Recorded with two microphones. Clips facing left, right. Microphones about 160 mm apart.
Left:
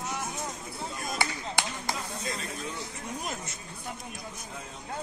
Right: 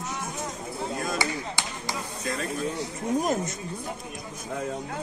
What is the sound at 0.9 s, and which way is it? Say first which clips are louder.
Chop: right 8 dB; 60° right (ahead or behind).